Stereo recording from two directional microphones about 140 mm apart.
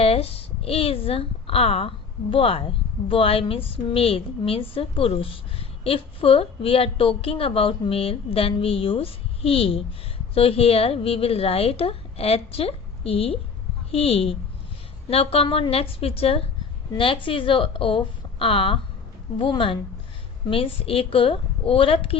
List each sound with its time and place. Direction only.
0.0 s a woman's voice: 45° left (ahead or behind)